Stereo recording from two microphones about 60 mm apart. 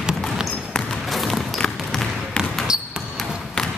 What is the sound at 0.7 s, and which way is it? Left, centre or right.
Basketball bounce, centre.